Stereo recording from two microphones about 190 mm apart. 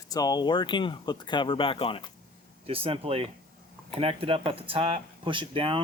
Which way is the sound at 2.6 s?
30° right (ahead or behind).